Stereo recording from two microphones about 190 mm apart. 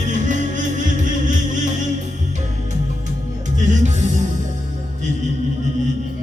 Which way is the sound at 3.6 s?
40° right (ahead or behind).